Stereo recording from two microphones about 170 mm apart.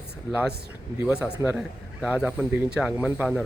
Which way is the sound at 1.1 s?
15° left (ahead or behind).